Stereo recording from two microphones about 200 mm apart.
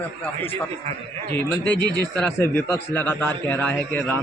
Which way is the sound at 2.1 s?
10° left (ahead or behind).